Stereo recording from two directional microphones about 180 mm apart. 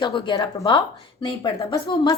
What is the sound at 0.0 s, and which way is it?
A woman's voice, 25° left (ahead or behind).